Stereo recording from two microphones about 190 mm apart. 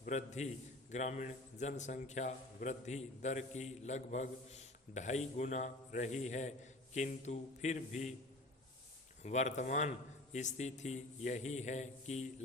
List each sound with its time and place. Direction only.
0.0 s a man's voice: 40° left (ahead or behind)
9.2 s a man's voice: 40° left (ahead or behind)